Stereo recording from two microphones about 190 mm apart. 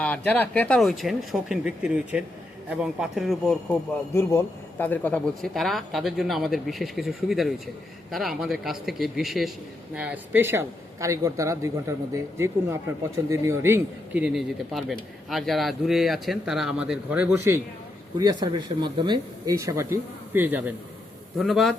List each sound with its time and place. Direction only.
0.0 s a man's voice: 10° left (ahead or behind)